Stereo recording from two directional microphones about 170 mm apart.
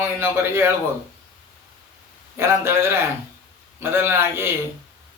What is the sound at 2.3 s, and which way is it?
Speech, 15° right (ahead or behind).